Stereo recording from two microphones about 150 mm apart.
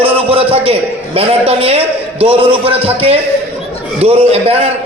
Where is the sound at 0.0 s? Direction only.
40° right (ahead or behind).